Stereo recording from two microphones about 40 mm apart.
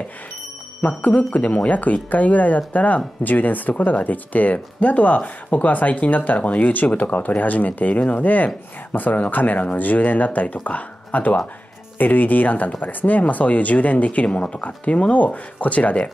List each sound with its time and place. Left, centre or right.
0.8 s speech: left